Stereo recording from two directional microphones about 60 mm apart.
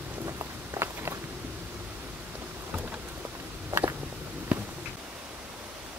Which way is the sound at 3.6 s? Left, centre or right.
Right.